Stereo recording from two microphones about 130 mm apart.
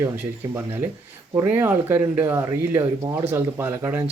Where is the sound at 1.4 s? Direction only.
20° right (ahead or behind).